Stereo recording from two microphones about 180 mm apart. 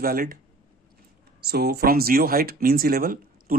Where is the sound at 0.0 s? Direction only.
55° right (ahead or behind).